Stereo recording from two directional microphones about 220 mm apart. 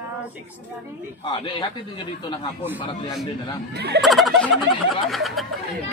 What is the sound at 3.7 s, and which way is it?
Speech, 50° right (ahead or behind).